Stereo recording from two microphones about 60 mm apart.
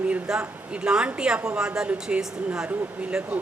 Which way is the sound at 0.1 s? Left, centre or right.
Centre.